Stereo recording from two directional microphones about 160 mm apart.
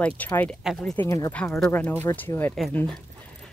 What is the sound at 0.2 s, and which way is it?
Speech, 10° left (ahead or behind).